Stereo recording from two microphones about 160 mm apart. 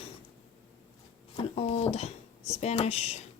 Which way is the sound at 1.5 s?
40° left (ahead or behind).